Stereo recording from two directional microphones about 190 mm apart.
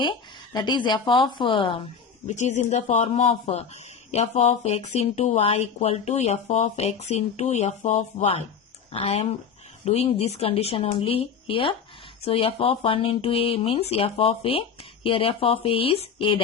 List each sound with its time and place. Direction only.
0.5 s speech: 25° left (ahead or behind)
2.2 s speech: 40° left (ahead or behind)